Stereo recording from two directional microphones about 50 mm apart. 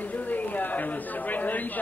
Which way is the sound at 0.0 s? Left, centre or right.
Left.